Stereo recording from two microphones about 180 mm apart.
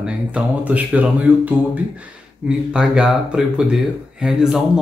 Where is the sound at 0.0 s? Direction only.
5° right (ahead or behind).